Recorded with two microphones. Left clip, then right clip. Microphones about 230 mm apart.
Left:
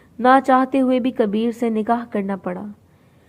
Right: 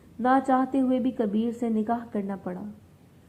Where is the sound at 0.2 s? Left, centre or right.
Left.